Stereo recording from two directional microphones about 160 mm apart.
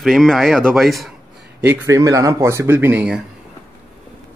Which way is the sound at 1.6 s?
20° right (ahead or behind).